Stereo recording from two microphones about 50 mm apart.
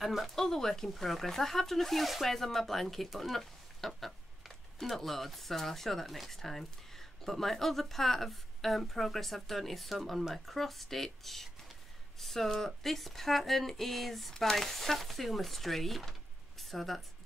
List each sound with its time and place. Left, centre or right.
0.0 s speech: centre
0.4 s speech: centre